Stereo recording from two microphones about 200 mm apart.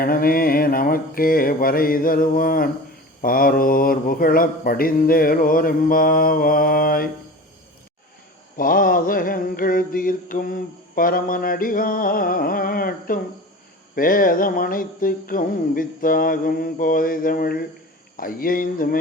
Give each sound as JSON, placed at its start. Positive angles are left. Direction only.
{"t": 0.0, "sound": "mantra", "side_deg": 45}
{"t": 8.5, "sound": "mantra", "side_deg": 45}